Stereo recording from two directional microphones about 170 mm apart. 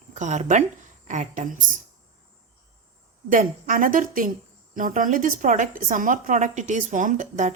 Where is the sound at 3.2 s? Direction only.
50° right (ahead or behind).